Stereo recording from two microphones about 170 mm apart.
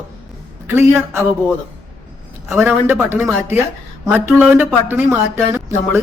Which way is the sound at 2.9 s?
10° right (ahead or behind).